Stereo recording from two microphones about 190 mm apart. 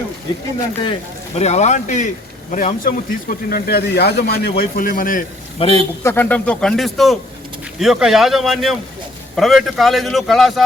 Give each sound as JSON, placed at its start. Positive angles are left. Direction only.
{"t": 1.4, "sound": "speech", "side_deg": 35}
{"t": 5.5, "sound": "a man's voice", "side_deg": 30}
{"t": 6.0, "sound": "speech", "side_deg": 10}